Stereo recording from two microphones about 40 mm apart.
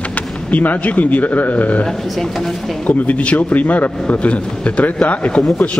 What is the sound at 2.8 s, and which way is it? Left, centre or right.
A man's voice, left.